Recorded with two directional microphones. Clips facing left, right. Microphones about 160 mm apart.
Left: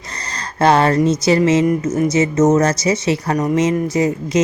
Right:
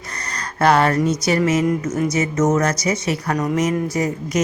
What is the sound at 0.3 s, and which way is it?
Speech, 25° left (ahead or behind).